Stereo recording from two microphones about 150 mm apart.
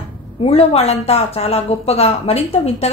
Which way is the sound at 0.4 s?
40° left (ahead or behind).